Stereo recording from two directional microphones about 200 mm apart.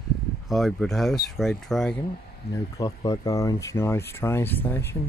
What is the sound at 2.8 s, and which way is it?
Speech, 20° left (ahead or behind).